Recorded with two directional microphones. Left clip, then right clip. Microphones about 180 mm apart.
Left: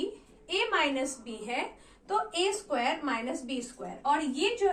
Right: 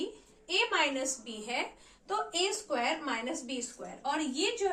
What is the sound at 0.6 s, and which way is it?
Speech, 30° right (ahead or behind).